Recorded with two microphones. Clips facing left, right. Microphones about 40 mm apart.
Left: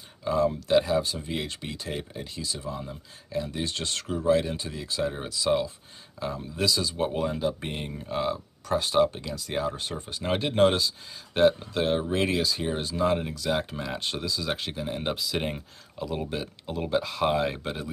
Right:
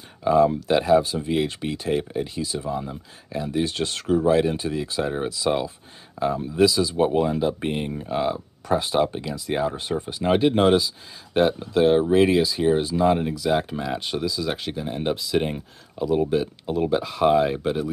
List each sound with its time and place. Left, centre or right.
0.2 s speech: right
6.7 s speech: centre